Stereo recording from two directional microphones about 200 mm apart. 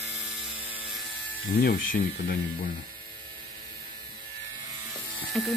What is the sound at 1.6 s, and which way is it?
Speech, 50° left (ahead or behind).